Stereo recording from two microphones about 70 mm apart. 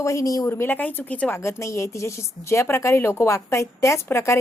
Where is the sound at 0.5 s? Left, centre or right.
Left.